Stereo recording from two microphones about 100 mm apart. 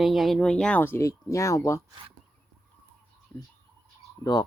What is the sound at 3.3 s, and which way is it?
Bird, 20° left (ahead or behind).